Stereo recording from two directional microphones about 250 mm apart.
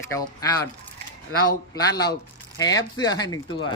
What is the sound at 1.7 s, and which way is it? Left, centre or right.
Speech, centre.